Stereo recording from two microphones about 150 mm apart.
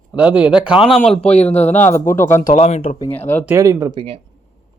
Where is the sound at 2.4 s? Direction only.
45° left (ahead or behind).